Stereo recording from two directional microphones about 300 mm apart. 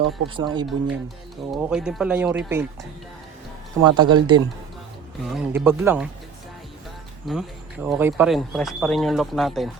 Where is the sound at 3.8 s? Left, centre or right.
Centre.